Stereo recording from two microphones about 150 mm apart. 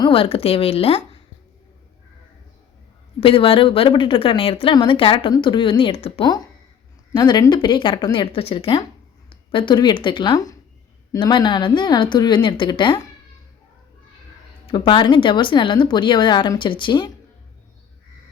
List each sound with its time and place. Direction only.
0.0 s a woman's voice: 35° left (ahead or behind)
3.2 s a woman's voice: 40° left (ahead or behind)
14.7 s a woman's voice: 30° left (ahead or behind)